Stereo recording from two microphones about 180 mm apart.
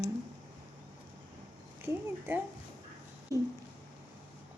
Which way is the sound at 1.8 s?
10° right (ahead or behind).